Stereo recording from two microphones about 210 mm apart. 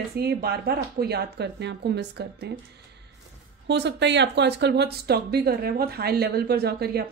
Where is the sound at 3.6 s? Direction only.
55° right (ahead or behind).